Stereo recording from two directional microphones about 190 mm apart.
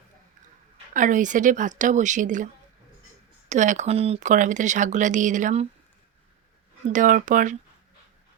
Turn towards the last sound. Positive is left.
turn(degrees=-45)  # may be behind; listen again after turning